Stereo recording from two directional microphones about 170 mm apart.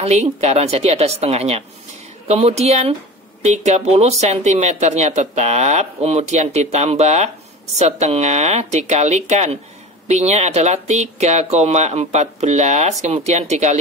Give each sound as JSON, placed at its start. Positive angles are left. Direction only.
{"t": 0.0, "sound": "speech", "side_deg": -40}